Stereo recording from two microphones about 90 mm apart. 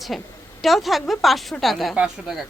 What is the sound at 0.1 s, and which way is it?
A woman's voice, centre (ahead or behind).